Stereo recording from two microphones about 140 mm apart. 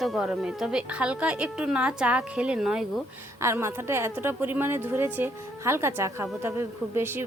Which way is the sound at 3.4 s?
20° right (ahead or behind).